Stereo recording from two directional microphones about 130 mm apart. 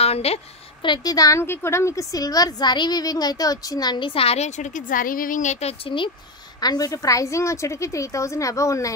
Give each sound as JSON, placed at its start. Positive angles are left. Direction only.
{"t": 0.0, "sound": "a woman's voice", "side_deg": 50}
{"t": 0.8, "sound": "a woman's voice", "side_deg": 30}
{"t": 6.6, "sound": "a woman's voice", "side_deg": 30}